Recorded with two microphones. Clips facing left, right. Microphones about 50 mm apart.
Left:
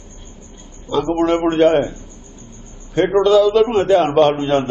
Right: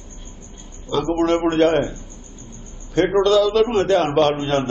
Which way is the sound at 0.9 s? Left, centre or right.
Centre.